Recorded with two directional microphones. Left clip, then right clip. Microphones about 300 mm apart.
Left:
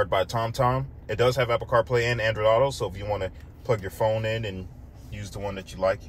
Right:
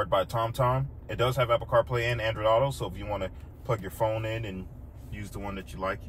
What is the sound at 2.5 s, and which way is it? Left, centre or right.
Speech, left.